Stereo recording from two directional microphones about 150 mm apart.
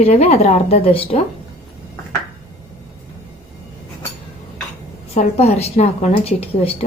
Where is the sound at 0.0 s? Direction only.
45° left (ahead or behind).